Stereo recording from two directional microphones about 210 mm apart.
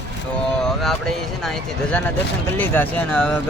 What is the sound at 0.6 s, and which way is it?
Speech, centre (ahead or behind).